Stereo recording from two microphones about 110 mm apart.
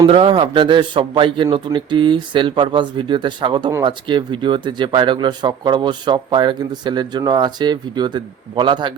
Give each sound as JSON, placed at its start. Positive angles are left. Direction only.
{"t": 0.1, "sound": "speech", "side_deg": -55}